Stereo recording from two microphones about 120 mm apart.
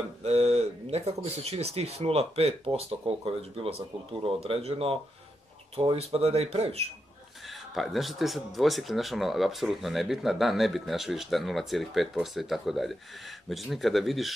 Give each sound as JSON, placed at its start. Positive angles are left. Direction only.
{"t": 0.2, "sound": "speech", "side_deg": -60}
{"t": 7.4, "sound": "speech", "side_deg": 0}